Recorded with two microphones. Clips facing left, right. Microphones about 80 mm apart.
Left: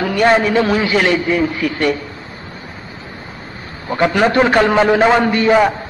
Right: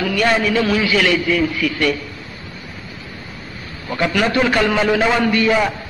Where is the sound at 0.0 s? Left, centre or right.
Left.